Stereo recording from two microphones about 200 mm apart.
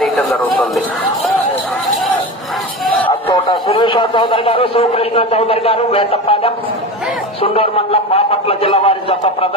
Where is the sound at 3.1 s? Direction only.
30° left (ahead or behind).